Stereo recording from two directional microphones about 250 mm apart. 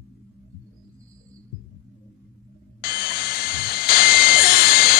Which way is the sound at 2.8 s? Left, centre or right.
Left.